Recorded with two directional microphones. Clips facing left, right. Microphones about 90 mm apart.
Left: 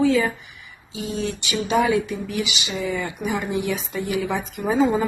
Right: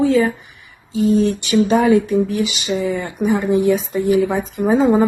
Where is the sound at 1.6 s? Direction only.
40° right (ahead or behind).